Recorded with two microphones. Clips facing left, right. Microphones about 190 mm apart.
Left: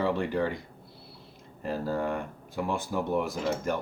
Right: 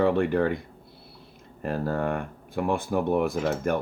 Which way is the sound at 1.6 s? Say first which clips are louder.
Right 3 dB; 60° right (ahead or behind).